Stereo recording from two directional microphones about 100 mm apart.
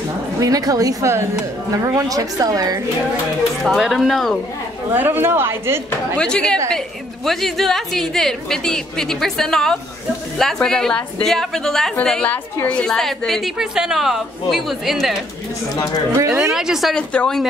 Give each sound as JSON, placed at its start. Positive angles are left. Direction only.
{"t": 0.4, "sound": "a woman's voice", "side_deg": -35}
{"t": 3.6, "sound": "a woman's voice", "side_deg": 0}
{"t": 4.9, "sound": "a woman's voice", "side_deg": -20}
{"t": 6.1, "sound": "a woman's voice", "side_deg": 10}
{"t": 16.2, "sound": "a woman's voice", "side_deg": -30}
{"t": 16.5, "sound": "a woman's voice", "side_deg": -5}
{"t": 16.9, "sound": "speech", "side_deg": 10}